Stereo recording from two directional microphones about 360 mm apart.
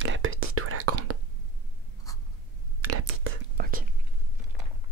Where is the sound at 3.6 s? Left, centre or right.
Right.